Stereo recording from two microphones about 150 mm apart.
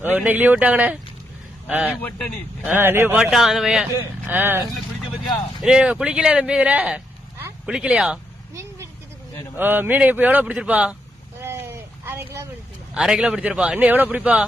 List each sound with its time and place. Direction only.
0.0 s speech: 10° right (ahead or behind)
3.9 s speech: 15° right (ahead or behind)
5.6 s speech: 5° right (ahead or behind)
9.6 s speech: 15° right (ahead or behind)
11.4 s a sound: 15° right (ahead or behind)
12.9 s speech: 5° right (ahead or behind)